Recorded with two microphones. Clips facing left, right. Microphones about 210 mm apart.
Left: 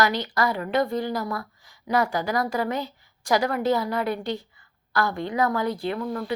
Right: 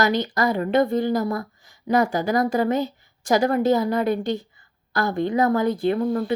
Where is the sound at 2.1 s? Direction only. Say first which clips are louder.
Right 4 dB; 45° right (ahead or behind).